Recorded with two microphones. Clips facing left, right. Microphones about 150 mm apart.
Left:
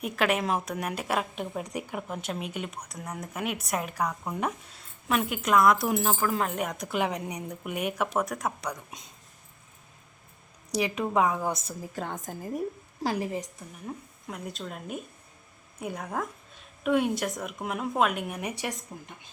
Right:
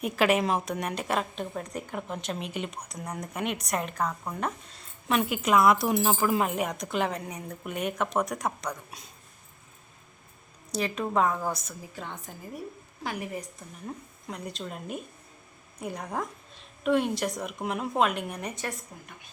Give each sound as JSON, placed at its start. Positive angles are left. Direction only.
{"t": 0.0, "sound": "speech", "side_deg": 0}
{"t": 8.7, "sound": "a woman's voice", "side_deg": 20}
{"t": 10.7, "sound": "a woman's voice", "side_deg": 15}
{"t": 11.9, "sound": "a woman's voice", "side_deg": 45}
{"t": 13.0, "sound": "a woman's voice", "side_deg": 30}
{"t": 13.8, "sound": "speech", "side_deg": 0}
{"t": 18.6, "sound": "a woman's voice", "side_deg": 20}